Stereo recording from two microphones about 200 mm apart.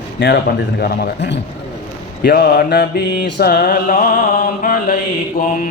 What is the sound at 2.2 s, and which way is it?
Mantra, 55° left (ahead or behind).